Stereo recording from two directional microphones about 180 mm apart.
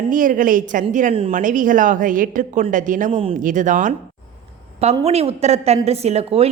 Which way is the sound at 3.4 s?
45° right (ahead or behind).